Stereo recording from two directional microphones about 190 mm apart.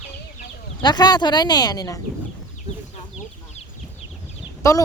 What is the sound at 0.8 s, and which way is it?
Speech, 20° left (ahead or behind).